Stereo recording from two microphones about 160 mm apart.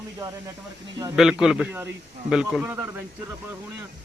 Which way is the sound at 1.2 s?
5° right (ahead or behind).